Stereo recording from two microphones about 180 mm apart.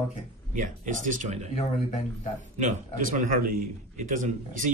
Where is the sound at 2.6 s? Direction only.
45° right (ahead or behind).